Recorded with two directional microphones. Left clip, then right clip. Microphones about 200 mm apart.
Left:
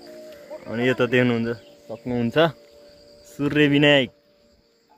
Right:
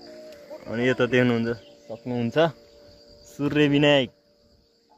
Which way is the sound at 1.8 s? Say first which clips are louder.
Left 3 dB; 15° left (ahead or behind).